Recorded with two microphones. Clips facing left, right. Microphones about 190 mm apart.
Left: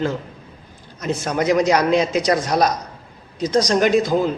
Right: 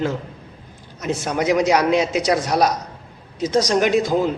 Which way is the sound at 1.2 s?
10° right (ahead or behind).